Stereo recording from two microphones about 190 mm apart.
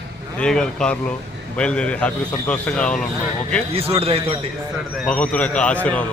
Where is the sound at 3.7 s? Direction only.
30° right (ahead or behind).